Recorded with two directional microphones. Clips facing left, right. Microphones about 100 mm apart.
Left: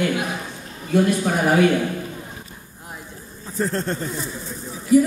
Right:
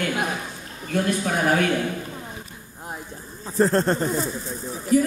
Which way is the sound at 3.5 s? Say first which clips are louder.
Right 5 dB; 40° right (ahead or behind).